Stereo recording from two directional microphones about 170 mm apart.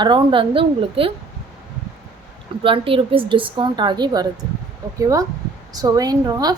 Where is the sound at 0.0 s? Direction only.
30° right (ahead or behind).